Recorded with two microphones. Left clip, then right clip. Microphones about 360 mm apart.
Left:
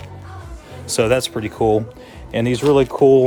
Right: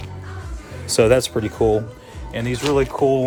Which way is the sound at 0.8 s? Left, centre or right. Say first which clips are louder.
Right 2 dB; centre.